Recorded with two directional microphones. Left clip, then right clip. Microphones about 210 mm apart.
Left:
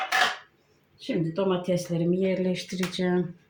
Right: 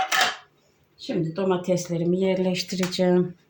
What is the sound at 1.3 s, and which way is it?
Speech, 25° right (ahead or behind).